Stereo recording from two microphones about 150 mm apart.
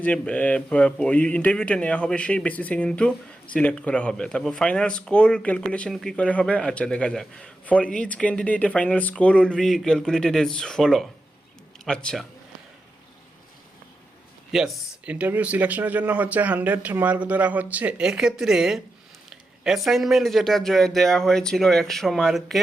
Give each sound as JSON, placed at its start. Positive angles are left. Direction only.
{"t": 0.0, "sound": "a man's voice", "side_deg": 10}
{"t": 14.5, "sound": "a man's voice", "side_deg": 0}